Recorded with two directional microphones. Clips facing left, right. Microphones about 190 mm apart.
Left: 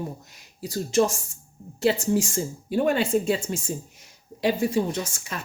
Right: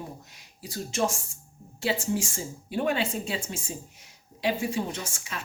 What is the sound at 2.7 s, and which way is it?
A woman's voice, 45° left (ahead or behind).